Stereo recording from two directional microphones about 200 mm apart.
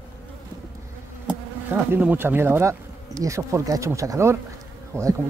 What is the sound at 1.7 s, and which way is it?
Speech, 10° right (ahead or behind).